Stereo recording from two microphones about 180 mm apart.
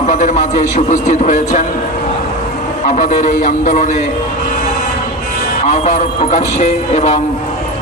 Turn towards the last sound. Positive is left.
turn(degrees=40)  # may be behind; listen again after turning